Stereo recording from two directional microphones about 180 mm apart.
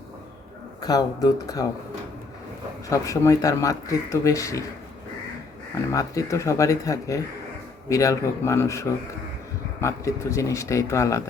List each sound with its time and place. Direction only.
0.8 s speech: 20° left (ahead or behind)
2.9 s speech: 15° left (ahead or behind)
5.9 s speech: 15° left (ahead or behind)